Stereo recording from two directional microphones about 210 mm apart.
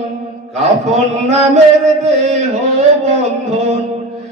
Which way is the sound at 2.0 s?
30° right (ahead or behind).